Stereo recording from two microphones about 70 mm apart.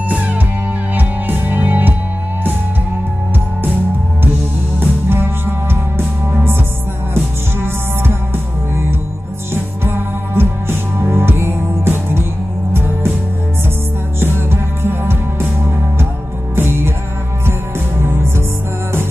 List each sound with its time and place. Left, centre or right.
0.1 s music: right
4.7 s music: right
7.2 s music: right
9.5 s music: right
14.2 s music: right
16.5 s music: right
18.0 s music: right